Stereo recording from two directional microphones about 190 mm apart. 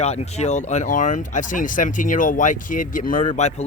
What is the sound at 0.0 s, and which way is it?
Speech, 35° left (ahead or behind).